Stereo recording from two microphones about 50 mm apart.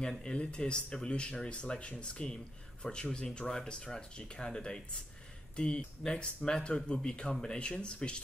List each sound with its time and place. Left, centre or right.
0.2 s speech: centre